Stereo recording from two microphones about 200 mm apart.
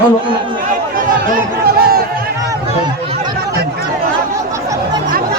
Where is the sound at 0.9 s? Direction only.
45° right (ahead or behind).